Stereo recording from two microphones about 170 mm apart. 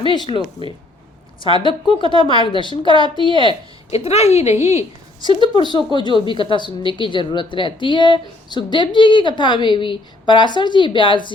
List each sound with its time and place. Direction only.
0.0 s a woman's voice: 30° left (ahead or behind)
1.5 s a woman's voice: 30° left (ahead or behind)
4.6 s a woman's voice: 15° right (ahead or behind)
5.5 s a woman's voice: 25° left (ahead or behind)